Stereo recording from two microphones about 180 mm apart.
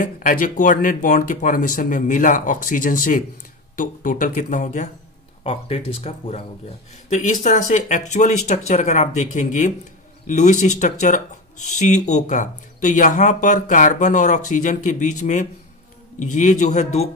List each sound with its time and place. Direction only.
0.0 s speech: 50° left (ahead or behind)
5.4 s speech: 30° left (ahead or behind)